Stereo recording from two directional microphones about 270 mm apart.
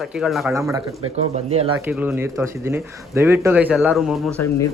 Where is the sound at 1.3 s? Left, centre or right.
Right.